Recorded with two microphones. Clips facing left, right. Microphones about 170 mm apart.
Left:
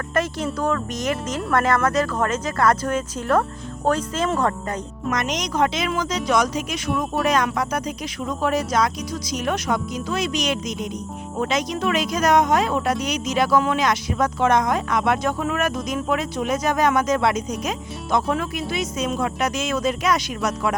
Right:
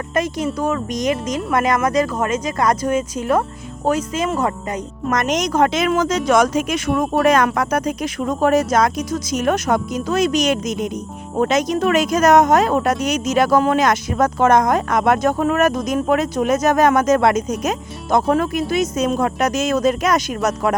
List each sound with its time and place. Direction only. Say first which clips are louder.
0.1 s speech: right 3 dB; 15° right (ahead or behind)
5.0 s speech: right 6 dB; 50° right (ahead or behind)